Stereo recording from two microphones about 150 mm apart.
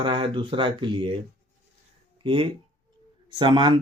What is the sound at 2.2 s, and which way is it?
Speech, 35° right (ahead or behind).